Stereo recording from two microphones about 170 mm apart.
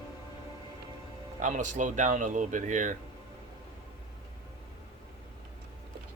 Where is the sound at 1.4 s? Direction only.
45° right (ahead or behind).